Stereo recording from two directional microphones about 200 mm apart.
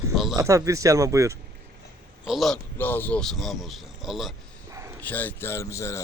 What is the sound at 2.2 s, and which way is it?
A man's voice, centre (ahead or behind).